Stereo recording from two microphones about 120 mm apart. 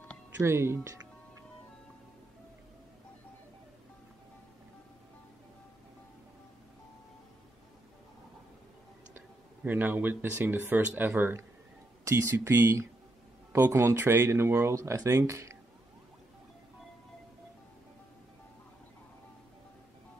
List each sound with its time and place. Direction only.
0.4 s speech: 20° right (ahead or behind)
9.1 s speech: 15° right (ahead or behind)